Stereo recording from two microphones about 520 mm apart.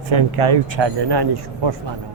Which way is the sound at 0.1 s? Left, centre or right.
Right.